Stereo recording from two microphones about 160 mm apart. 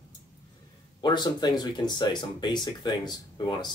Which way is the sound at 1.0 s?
25° left (ahead or behind).